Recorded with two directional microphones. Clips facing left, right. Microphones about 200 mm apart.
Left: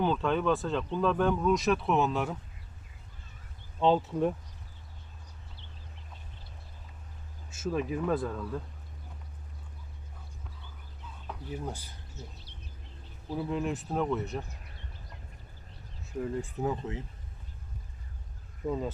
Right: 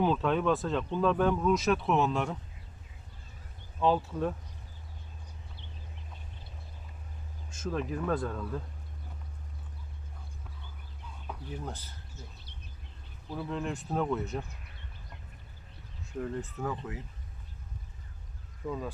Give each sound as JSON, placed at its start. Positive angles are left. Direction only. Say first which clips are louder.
{"t": 0.0, "sound": "speech", "louder": "even", "side_deg": 0}
{"t": 3.8, "sound": "speech", "louder": "left 2 dB", "side_deg": 20}
{"t": 7.5, "sound": "speech", "louder": "left 2 dB", "side_deg": 5}
{"t": 11.3, "sound": "speech", "louder": "left 2 dB", "side_deg": 10}
{"t": 13.3, "sound": "speech", "louder": "left 3 dB", "side_deg": 10}
{"t": 16.2, "sound": "speech", "louder": "left 3 dB", "side_deg": 10}
{"t": 18.6, "sound": "speech", "louder": "left 4 dB", "side_deg": 25}